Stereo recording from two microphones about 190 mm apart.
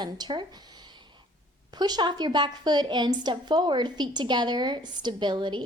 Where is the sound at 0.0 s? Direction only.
25° right (ahead or behind).